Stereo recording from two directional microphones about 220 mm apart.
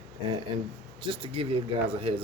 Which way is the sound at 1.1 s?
25° right (ahead or behind).